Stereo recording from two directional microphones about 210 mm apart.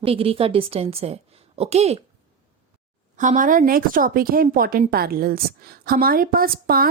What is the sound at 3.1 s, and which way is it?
A woman's voice, 35° right (ahead or behind).